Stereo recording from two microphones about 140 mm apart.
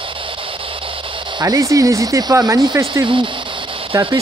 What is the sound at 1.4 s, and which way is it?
Speech, 25° right (ahead or behind).